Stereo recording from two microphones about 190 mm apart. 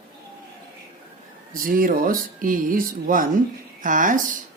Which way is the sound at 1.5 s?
45° right (ahead or behind).